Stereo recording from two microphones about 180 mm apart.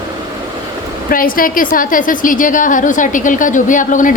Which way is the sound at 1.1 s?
50° left (ahead or behind).